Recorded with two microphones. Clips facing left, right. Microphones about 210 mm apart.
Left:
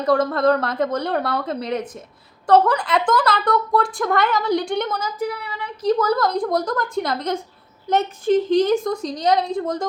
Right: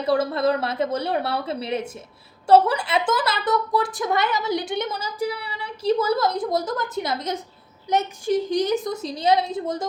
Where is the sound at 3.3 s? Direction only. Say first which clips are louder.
Left 3 dB; 20° right (ahead or behind).